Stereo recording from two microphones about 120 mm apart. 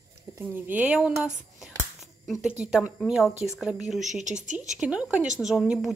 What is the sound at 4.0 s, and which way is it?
Speech, 85° right.